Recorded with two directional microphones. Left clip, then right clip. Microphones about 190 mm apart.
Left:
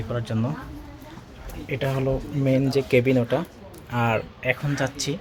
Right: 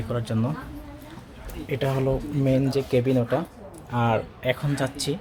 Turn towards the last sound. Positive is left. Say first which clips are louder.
# left 1 dB
turn(degrees=-5)  # may be behind; listen again after turning